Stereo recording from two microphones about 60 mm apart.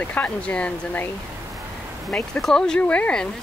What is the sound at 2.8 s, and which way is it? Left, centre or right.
Speech, left.